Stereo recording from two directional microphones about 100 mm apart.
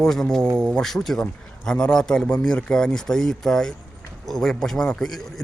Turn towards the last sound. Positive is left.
turn(degrees=5)  # may be behind; listen again after turning